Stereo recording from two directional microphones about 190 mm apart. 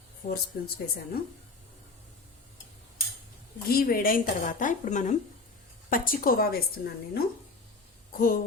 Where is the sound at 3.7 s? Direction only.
50° left (ahead or behind).